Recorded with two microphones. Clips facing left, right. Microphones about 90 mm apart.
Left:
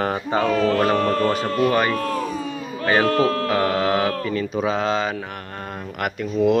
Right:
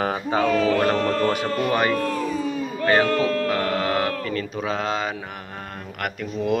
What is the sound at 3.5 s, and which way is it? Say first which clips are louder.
Speech: left 3 dB; 10° left (ahead or behind).